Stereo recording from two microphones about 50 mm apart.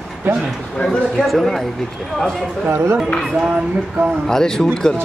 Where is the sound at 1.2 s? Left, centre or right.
Centre.